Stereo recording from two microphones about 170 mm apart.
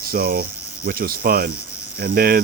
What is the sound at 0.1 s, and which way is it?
Speech, 60° right (ahead or behind).